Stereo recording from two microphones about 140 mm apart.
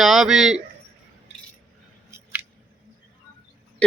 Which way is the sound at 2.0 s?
20° right (ahead or behind).